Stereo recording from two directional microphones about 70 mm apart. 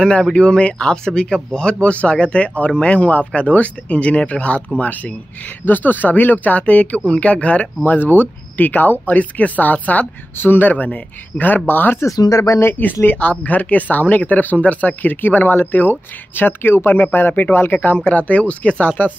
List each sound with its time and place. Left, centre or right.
0.0 s speech: centre; by 12.0 s left
12.2 s speech: left
12.5 s speech: left